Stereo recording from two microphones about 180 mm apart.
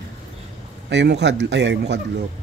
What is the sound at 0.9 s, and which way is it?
Speech, 75° right (ahead or behind).